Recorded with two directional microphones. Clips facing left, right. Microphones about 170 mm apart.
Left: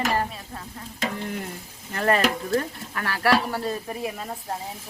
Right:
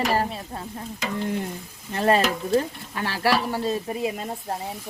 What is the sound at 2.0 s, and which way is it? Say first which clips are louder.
Speech: right 1 dB; 25° right (ahead or behind).